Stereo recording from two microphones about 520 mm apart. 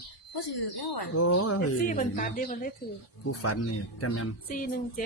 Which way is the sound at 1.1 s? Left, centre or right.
Left.